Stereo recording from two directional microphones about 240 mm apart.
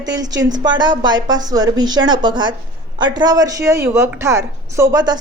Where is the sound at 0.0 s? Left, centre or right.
Centre.